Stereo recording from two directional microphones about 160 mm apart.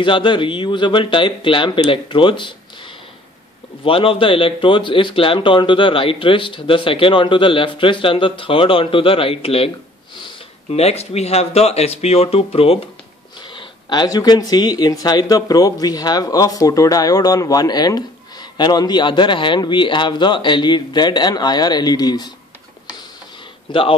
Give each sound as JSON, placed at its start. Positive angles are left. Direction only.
{"t": 0.0, "sound": "speech", "side_deg": 30}
{"t": 23.7, "sound": "speech", "side_deg": 35}